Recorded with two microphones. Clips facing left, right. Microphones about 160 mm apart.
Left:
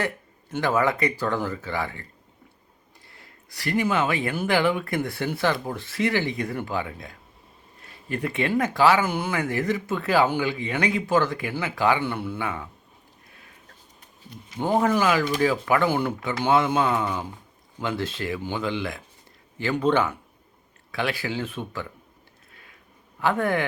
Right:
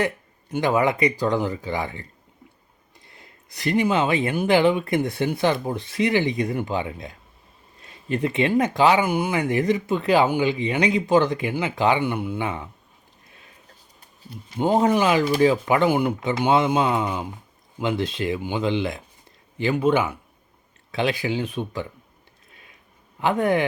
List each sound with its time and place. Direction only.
0.0 s speech: 15° right (ahead or behind)
3.1 s speech: 20° right (ahead or behind)
14.6 s speech: 20° right (ahead or behind)
19.7 s speech: 10° right (ahead or behind)
23.2 s speech: 20° right (ahead or behind)